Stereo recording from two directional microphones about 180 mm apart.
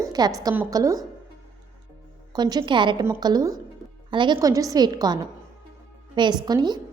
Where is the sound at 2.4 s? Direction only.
25° right (ahead or behind).